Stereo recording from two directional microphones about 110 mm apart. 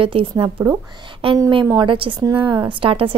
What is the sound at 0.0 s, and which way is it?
A woman's voice, 55° right (ahead or behind).